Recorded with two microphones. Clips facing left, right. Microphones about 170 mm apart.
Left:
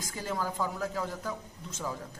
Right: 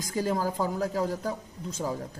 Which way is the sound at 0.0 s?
40° right (ahead or behind).